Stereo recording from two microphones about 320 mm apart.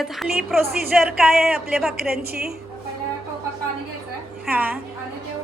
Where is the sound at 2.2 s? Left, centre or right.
Right.